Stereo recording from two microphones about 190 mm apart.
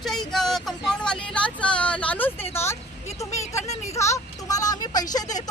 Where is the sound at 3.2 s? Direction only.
15° left (ahead or behind).